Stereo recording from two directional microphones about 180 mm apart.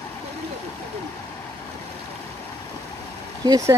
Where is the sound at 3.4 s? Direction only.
20° right (ahead or behind).